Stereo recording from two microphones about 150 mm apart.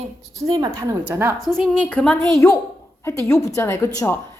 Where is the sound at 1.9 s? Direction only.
5° left (ahead or behind).